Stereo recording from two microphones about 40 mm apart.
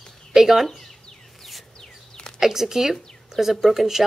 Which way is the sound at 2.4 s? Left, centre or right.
Centre.